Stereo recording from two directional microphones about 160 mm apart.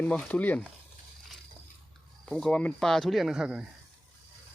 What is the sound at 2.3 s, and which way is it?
Speech, 5° left (ahead or behind).